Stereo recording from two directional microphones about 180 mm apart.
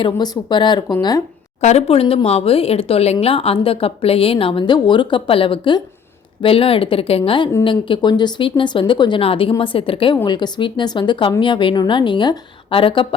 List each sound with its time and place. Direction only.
0.0 s a woman's voice: 25° left (ahead or behind)
1.6 s a woman's voice: 35° left (ahead or behind)